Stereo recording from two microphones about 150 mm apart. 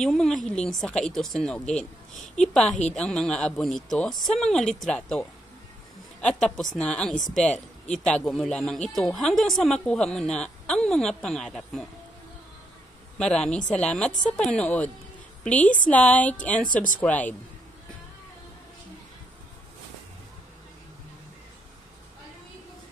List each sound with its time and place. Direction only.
0.0 s speech: centre (ahead or behind)
7.4 s speech: 50° left (ahead or behind)
7.9 s speech: 5° left (ahead or behind)
13.2 s a woman's voice: 5° left (ahead or behind)
16.7 s speech: 60° left (ahead or behind)
17.0 s speech: 10° left (ahead or behind)